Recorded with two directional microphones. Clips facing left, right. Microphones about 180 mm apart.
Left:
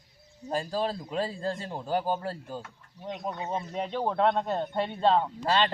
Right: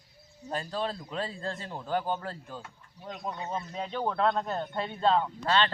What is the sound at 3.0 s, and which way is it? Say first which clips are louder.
Speech: left 3 dB; 20° left (ahead or behind).